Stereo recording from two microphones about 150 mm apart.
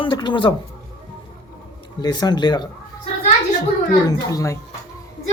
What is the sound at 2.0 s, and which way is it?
Speech, 25° left (ahead or behind).